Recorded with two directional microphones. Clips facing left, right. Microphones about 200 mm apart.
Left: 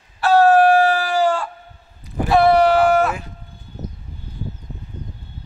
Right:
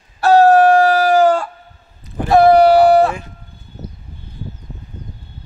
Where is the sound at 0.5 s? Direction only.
40° right (ahead or behind).